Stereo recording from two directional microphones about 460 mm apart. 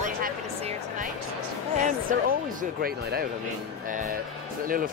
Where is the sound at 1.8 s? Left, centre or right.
Centre.